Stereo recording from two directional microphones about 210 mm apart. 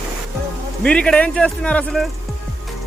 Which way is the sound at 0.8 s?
5° left (ahead or behind).